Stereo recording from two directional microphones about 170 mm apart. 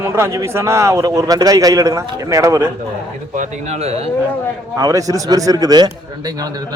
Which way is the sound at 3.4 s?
40° right (ahead or behind).